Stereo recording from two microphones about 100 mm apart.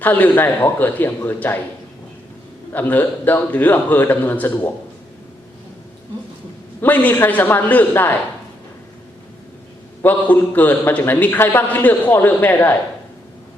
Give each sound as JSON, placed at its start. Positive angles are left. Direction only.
{"t": 0.0, "sound": "a man's voice", "side_deg": 20}
{"t": 2.7, "sound": "a man's voice", "side_deg": 20}
{"t": 6.8, "sound": "a man's voice", "side_deg": 15}
{"t": 10.0, "sound": "a man's voice", "side_deg": 20}